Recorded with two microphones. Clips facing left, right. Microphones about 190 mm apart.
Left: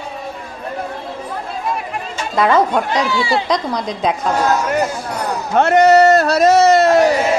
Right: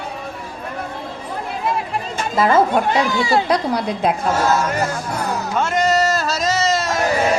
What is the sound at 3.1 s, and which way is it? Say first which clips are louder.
Speech: even; 45° right (ahead or behind).